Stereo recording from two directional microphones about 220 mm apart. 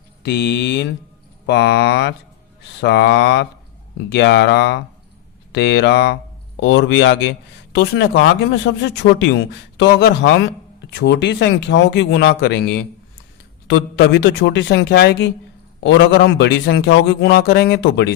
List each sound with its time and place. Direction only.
0.2 s speech: 50° left (ahead or behind)